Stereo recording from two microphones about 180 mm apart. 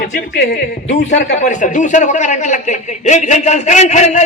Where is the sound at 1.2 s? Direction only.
45° left (ahead or behind).